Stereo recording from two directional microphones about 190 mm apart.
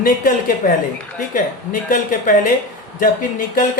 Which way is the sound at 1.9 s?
45° left (ahead or behind).